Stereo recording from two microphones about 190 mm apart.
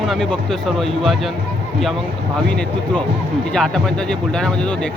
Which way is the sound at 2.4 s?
5° left (ahead or behind).